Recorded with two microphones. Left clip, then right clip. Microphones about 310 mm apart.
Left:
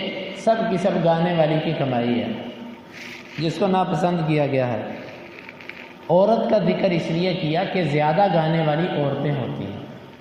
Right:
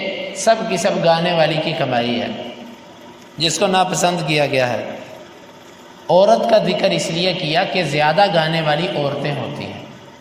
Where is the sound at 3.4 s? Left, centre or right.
Right.